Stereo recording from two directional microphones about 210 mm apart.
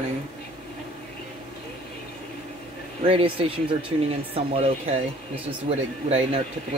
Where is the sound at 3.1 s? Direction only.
25° right (ahead or behind).